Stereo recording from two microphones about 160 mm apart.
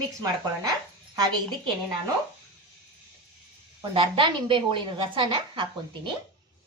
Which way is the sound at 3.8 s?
30° right (ahead or behind).